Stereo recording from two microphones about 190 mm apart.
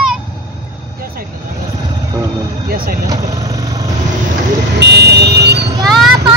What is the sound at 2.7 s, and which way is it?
Speech, 50° right (ahead or behind).